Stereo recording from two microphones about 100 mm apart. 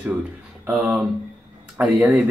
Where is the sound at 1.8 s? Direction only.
10° right (ahead or behind).